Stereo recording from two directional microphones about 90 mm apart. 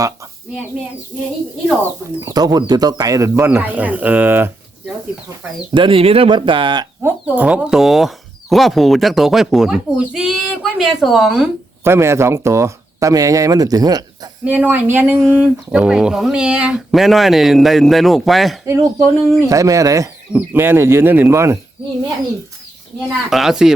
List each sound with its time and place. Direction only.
2.2 s speech: 45° right (ahead or behind); by 4.5 s 20° right (ahead or behind)
5.7 s speech: 80° right
7.0 s speech: 20° right (ahead or behind)
11.8 s speech: 30° right (ahead or behind); by 14.3 s 45° right (ahead or behind)
14.4 s speech: 20° right (ahead or behind)
15.3 s a sound: 15° right (ahead or behind)
16.9 s speech: centre (ahead or behind)
18.6 s speech: 35° right (ahead or behind)
20.3 s speech: 25° right (ahead or behind)
23.0 s speech: 5° right (ahead or behind)